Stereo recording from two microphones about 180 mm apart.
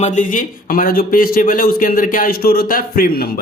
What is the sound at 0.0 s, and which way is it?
Speech, 45° left (ahead or behind).